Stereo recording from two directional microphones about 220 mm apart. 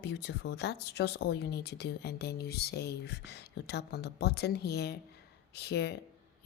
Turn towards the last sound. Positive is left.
turn(degrees=50)  # may be behind; listen again after turning